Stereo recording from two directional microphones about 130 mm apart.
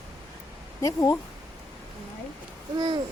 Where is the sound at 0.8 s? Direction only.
25° left (ahead or behind).